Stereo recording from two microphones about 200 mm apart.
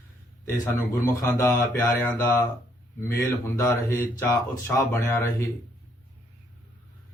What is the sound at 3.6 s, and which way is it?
Speech, 15° left (ahead or behind).